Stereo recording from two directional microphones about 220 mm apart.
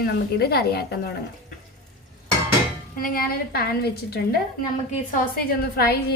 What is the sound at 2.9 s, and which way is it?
Speech, 40° left (ahead or behind).